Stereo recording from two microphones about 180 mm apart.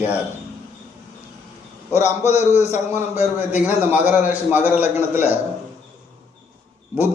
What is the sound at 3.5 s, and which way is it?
A man's voice, 10° right (ahead or behind).